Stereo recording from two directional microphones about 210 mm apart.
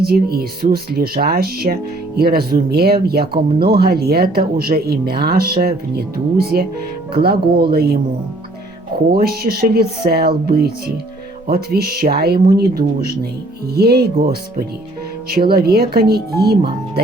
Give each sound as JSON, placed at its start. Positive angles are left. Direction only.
{"t": 0.0, "sound": "speech", "side_deg": -45}
{"t": 9.1, "sound": "speech", "side_deg": -45}
{"t": 15.3, "sound": "speech", "side_deg": -45}